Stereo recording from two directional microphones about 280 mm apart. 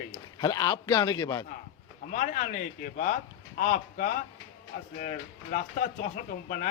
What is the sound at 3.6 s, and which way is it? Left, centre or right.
Speech, left.